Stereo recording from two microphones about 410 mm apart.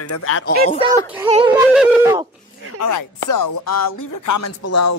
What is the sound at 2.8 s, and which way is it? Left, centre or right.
Chopping, left.